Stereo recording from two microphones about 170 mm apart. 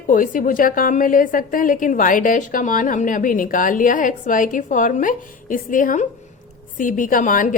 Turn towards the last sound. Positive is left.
turn(degrees=50)  # may be behind; listen again after turning